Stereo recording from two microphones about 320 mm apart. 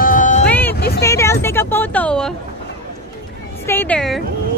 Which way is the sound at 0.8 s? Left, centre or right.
Left.